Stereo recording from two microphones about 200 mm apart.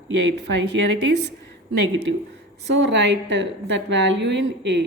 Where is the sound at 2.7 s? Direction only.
60° right (ahead or behind).